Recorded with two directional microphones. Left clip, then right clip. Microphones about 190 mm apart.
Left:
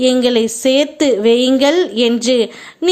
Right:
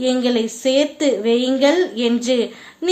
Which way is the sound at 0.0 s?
30° left (ahead or behind).